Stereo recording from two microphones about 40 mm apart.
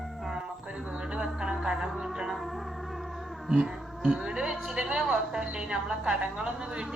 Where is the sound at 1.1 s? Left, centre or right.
Right.